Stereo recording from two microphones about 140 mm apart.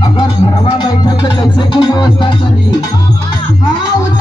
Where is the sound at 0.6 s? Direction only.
30° left (ahead or behind).